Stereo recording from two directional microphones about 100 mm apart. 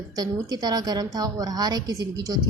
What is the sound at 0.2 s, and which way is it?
A woman's voice, 40° right (ahead or behind).